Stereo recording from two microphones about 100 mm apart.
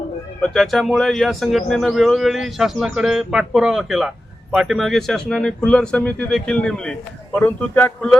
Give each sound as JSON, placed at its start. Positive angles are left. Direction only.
{"t": 0.4, "sound": "a man's voice", "side_deg": 0}
{"t": 7.3, "sound": "speech", "side_deg": 20}